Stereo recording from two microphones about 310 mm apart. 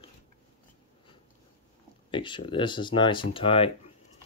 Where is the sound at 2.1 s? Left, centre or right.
Centre.